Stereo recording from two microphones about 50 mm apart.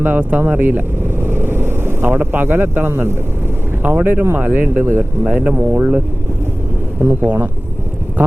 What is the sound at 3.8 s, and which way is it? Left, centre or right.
Speech, right.